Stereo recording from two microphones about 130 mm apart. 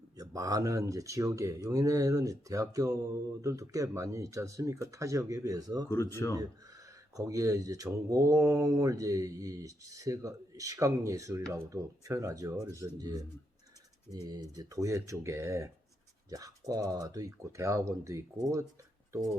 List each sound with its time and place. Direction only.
0.2 s speech: 25° right (ahead or behind)
5.9 s speech: 20° left (ahead or behind)
6.3 s speech: 25° right (ahead or behind)